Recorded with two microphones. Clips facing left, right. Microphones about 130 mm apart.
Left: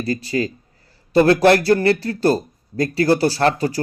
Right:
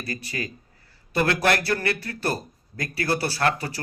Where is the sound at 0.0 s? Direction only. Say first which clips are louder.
Left 11 dB; 25° left (ahead or behind).